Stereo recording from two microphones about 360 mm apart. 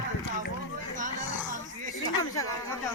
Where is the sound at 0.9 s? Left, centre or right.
Right.